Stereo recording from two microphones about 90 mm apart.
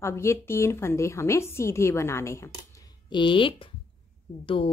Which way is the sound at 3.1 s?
65° left (ahead or behind).